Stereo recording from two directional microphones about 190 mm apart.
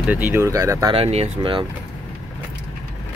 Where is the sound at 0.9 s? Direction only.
30° right (ahead or behind).